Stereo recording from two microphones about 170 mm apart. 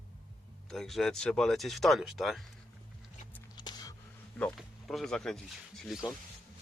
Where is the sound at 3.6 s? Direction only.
25° left (ahead or behind).